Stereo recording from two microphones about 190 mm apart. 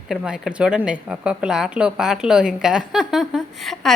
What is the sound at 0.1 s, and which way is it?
A woman's voice, centre (ahead or behind).